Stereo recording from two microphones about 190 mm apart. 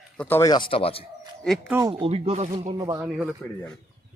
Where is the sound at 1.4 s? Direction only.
Centre (ahead or behind).